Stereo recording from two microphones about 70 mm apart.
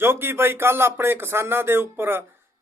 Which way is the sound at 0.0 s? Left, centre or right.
Right.